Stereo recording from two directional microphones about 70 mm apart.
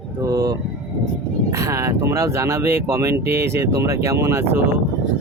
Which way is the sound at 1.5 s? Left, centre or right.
Right.